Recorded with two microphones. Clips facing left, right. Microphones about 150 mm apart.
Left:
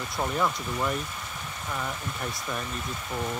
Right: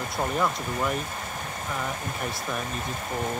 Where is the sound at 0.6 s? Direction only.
50° right (ahead or behind).